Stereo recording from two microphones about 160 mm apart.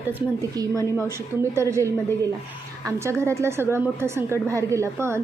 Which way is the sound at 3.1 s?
15° right (ahead or behind).